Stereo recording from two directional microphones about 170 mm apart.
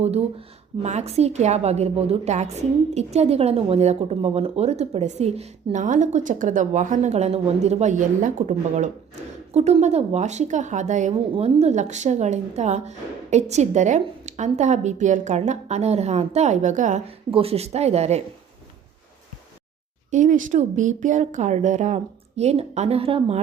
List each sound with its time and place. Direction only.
0.0 s a woman's voice: 35° right (ahead or behind)
17.3 s a woman's voice: 35° right (ahead or behind)
20.1 s a woman's voice: 45° right (ahead or behind)